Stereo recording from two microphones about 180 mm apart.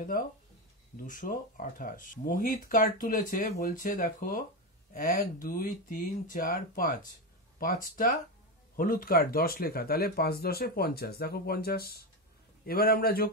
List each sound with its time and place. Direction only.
0.1 s speech: 50° left (ahead or behind)